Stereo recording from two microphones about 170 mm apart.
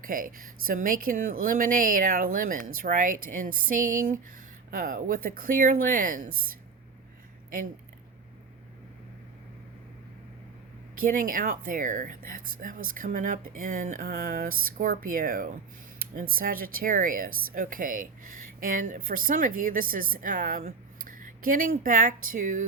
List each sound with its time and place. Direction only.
0.0 s a woman's voice: 55° right (ahead or behind)
11.0 s a woman's voice: 50° right (ahead or behind)